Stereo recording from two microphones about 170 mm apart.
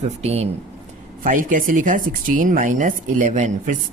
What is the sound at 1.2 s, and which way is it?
Speech, 50° right (ahead or behind).